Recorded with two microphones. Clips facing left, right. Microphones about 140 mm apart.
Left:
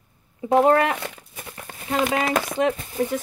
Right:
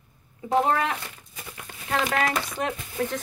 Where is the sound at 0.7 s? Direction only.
55° left (ahead or behind).